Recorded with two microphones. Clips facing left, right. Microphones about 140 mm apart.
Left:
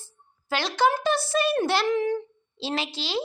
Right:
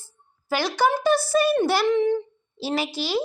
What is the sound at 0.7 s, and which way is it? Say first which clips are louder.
A child's voice: right 2 dB; 5° right (ahead or behind).